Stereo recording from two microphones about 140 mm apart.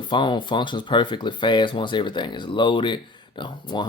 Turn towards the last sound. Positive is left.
turn(degrees=35)  # may be behind; listen again after turning